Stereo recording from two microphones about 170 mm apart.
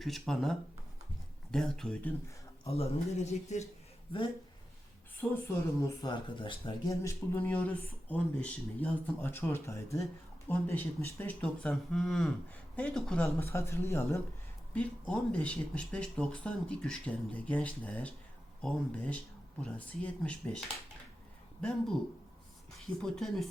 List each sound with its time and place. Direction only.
0.0 s speech: centre (ahead or behind)
2.6 s a man's voice: 35° left (ahead or behind)
4.1 s speech: 30° left (ahead or behind)
5.5 s speech: 20° left (ahead or behind); by 13.2 s 5° left (ahead or behind)
13.3 s speech: 15° left (ahead or behind)
23.0 s speech: 5° left (ahead or behind)